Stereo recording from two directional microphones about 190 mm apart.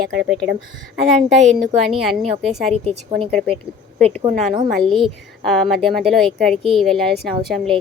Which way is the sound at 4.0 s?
5° left (ahead or behind).